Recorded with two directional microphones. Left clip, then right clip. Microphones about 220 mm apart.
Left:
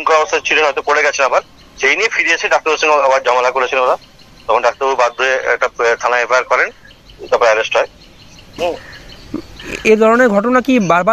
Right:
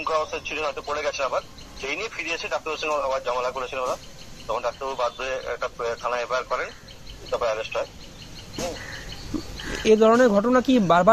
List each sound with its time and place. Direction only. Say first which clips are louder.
0.0 s speech: left 13 dB; 35° left (ahead or behind)
9.7 s speech: left 7 dB; 15° left (ahead or behind)